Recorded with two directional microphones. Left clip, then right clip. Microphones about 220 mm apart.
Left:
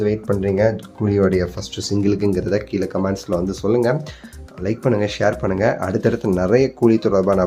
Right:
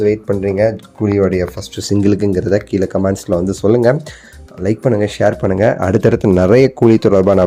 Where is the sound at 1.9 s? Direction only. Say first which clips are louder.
Right 5 dB; 30° right (ahead or behind).